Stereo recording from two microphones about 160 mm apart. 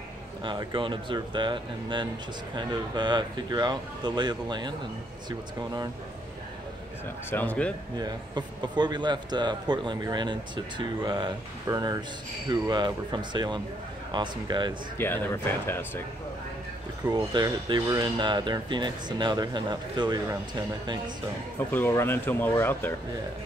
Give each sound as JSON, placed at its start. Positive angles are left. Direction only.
{"t": 0.4, "sound": "a man's voice", "side_deg": -25}
{"t": 7.2, "sound": "speech", "side_deg": 10}
{"t": 8.0, "sound": "a man's voice", "side_deg": -25}
{"t": 15.0, "sound": "speech", "side_deg": 15}
{"t": 17.1, "sound": "a man's voice", "side_deg": -25}
{"t": 21.5, "sound": "speech", "side_deg": 10}